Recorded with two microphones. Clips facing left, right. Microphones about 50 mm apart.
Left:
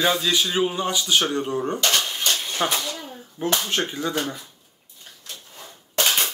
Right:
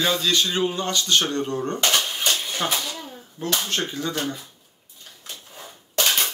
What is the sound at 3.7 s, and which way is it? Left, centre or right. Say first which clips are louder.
Speech: left 1 dB; centre.